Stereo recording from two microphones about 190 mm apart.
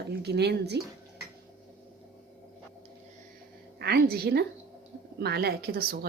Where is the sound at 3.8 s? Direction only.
55° right (ahead or behind).